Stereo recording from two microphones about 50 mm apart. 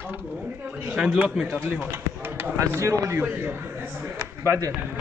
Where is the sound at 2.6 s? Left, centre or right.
Right.